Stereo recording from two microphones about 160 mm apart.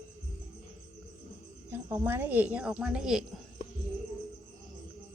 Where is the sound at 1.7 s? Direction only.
15° right (ahead or behind).